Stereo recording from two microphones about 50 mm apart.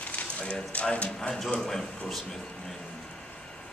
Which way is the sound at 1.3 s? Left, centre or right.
Centre.